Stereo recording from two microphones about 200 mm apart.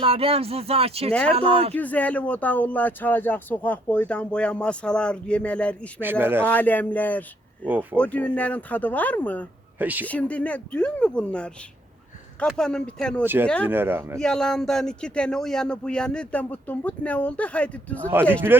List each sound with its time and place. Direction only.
0.0 s speech: 30° right (ahead or behind)
1.7 s speech: 10° left (ahead or behind)
6.0 s speech: 10° right (ahead or behind)
6.4 s speech: 10° left (ahead or behind)
7.6 s speech: 10° right (ahead or behind)
7.9 s speech: 5° left (ahead or behind)
9.7 s speech: 10° right (ahead or behind)
10.1 s speech: 5° left (ahead or behind)
13.2 s speech: 10° right (ahead or behind)
14.2 s speech: 5° left (ahead or behind)
18.0 s speech: 10° right (ahead or behind)